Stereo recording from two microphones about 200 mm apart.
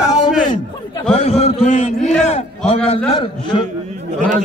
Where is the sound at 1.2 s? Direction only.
30° left (ahead or behind).